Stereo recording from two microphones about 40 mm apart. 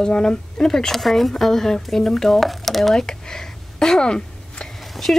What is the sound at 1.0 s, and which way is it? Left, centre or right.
Speech, centre.